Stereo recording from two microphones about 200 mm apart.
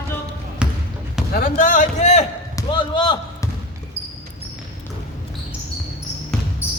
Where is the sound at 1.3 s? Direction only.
45° left (ahead or behind).